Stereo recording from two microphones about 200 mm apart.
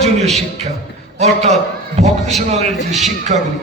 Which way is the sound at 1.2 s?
35° right (ahead or behind).